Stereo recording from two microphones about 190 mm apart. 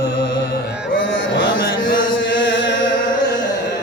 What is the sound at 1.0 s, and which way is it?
Chant, 70° left (ahead or behind).